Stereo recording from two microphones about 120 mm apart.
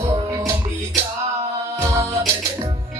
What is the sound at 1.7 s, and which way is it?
Music, 25° right (ahead or behind).